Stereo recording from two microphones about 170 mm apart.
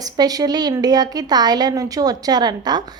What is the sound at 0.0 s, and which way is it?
A woman's voice, 20° right (ahead or behind).